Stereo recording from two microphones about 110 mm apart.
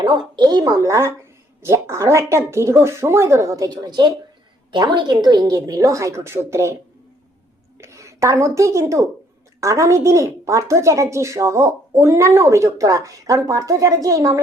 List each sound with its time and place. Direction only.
0.0 s a woman's voice: 45° right (ahead or behind); by 6.7 s 25° right (ahead or behind)
7.8 s a woman's voice: 25° right (ahead or behind)